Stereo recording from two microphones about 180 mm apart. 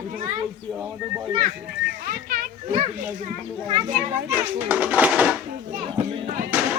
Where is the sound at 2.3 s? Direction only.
50° right (ahead or behind).